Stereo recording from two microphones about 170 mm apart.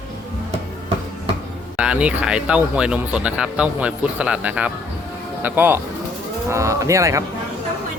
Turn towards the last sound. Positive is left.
turn(degrees=-20)  # may be behind; listen again after turning